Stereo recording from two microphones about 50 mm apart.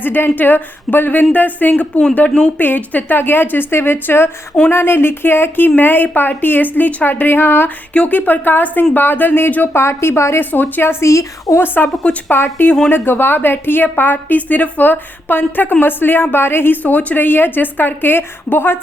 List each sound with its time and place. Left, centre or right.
0.0 s a woman's voice: left
2.6 s speech: left
7.9 s a woman's voice: left
9.0 s speech: left
9.7 s speech: left
10.5 s speech: left
11.0 s a woman's voice: left
11.6 s a woman's voice: left
16.8 s a woman's voice: left
17.2 s speech: left